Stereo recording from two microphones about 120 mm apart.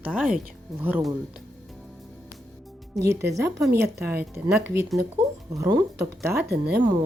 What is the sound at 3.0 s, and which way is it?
A woman's voice, 25° right (ahead or behind).